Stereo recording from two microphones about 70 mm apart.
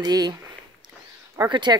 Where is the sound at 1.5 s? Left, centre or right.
Right.